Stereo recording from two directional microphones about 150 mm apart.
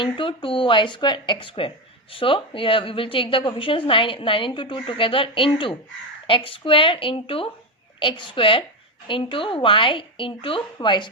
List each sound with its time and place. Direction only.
0.0 s a woman's voice: 35° left (ahead or behind)